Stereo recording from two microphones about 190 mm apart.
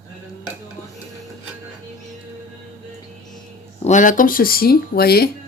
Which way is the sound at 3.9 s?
45° left (ahead or behind).